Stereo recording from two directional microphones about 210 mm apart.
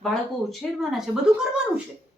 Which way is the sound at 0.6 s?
Centre (ahead or behind).